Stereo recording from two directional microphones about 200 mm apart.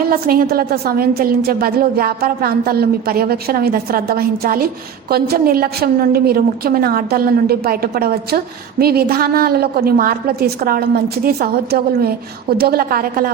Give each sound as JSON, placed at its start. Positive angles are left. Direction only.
{"t": 0.1, "sound": "a woman's voice", "side_deg": -50}